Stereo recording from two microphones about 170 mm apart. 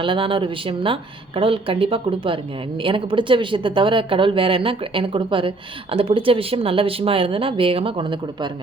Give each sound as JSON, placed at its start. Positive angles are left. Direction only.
{"t": 0.0, "sound": "speech", "side_deg": -30}